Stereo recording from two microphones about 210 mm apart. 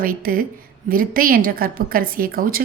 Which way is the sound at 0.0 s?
40° right (ahead or behind).